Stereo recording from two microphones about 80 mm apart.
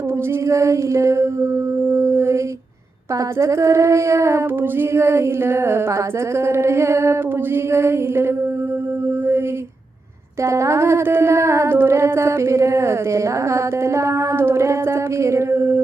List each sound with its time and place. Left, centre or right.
0.4 s speech: right
1.9 s mantra: right
3.3 s speech: right
10.4 s speech: right